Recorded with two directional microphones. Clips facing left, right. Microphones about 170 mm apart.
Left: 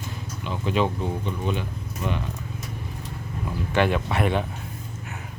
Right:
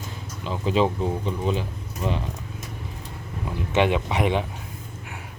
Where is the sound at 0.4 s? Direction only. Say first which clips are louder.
Right 2 dB; 30° right (ahead or behind).